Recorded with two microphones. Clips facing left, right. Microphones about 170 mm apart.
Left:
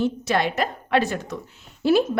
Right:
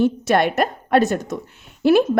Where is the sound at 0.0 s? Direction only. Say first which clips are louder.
Right 5 dB; 55° right (ahead or behind).